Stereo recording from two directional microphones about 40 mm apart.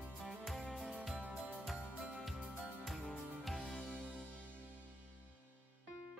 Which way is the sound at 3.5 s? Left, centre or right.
Centre.